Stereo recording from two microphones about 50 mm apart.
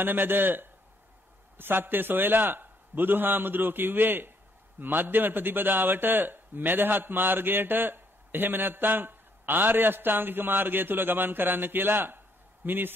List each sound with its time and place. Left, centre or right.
0.0 s a man's voice: right